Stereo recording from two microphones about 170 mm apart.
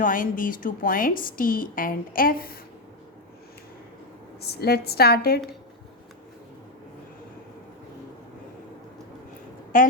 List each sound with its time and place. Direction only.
0.0 s a woman's voice: 55° left (ahead or behind)
4.4 s a woman's voice: 70° left (ahead or behind)
9.7 s a woman's voice: 55° left (ahead or behind)